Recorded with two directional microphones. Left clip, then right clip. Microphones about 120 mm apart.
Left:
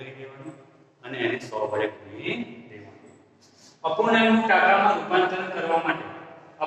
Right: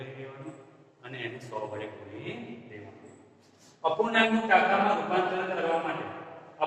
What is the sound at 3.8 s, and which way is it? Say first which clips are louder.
A man's voice: left 4 dB; 30° left (ahead or behind).